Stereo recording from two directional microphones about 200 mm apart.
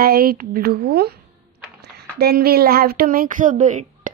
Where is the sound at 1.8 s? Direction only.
50° right (ahead or behind).